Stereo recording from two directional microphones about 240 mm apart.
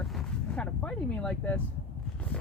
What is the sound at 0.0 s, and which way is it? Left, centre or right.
Vehicle, centre.